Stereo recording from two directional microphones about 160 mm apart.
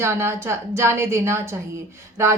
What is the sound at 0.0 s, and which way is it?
Speech, 15° right (ahead or behind).